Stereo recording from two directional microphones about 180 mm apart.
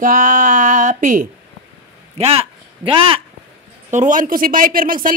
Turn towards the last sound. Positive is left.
turn(degrees=-50)  # may be behind; listen again after turning